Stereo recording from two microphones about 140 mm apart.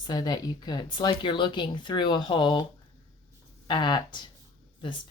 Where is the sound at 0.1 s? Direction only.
30° left (ahead or behind).